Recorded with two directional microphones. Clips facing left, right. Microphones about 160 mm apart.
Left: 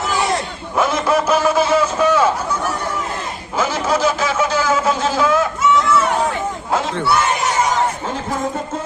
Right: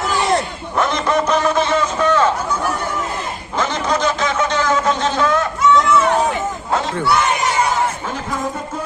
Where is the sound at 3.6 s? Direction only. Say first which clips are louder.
Left 1 dB; 5° left (ahead or behind).